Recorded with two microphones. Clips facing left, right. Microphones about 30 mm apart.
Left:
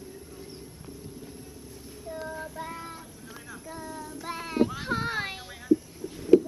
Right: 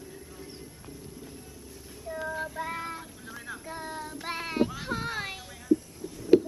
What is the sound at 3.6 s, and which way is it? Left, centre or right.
Child singing, right.